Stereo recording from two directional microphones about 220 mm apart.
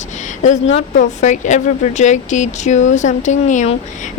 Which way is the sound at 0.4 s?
35° left (ahead or behind).